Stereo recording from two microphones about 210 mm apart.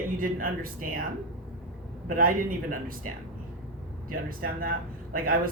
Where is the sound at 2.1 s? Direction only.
40° right (ahead or behind).